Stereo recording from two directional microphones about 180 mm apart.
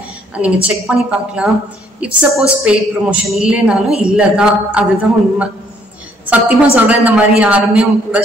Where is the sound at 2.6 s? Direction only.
5° right (ahead or behind).